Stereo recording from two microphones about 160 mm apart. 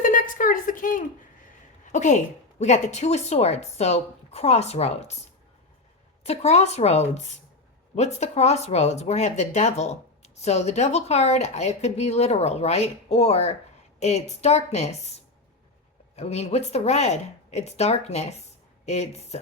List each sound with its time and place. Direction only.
0.0 s a sound: 55° left (ahead or behind)
1.8 s speech: 50° left (ahead or behind)
6.2 s speech: 40° left (ahead or behind)
16.1 s speech: 40° left (ahead or behind)